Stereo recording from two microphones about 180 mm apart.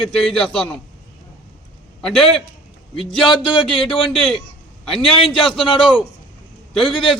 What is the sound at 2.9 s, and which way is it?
A man's voice, 30° left (ahead or behind).